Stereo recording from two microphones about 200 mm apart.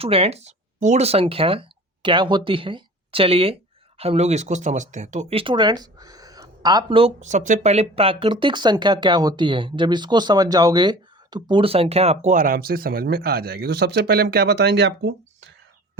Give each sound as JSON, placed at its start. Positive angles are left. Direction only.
{"t": 0.0, "sound": "speech", "side_deg": -30}